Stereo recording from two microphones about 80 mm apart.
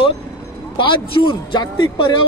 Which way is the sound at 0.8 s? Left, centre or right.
Left.